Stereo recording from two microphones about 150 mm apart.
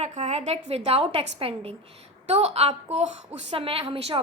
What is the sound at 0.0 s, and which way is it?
A woman's voice, 45° right (ahead or behind).